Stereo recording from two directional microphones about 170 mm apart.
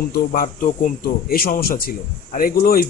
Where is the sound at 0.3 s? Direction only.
50° left (ahead or behind).